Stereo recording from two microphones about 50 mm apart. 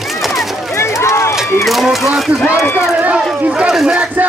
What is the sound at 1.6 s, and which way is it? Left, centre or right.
Speech, centre.